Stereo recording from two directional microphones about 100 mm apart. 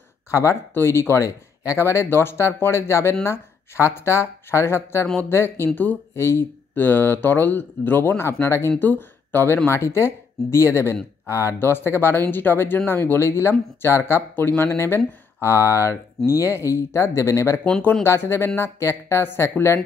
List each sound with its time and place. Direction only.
0.3 s speech: 30° left (ahead or behind)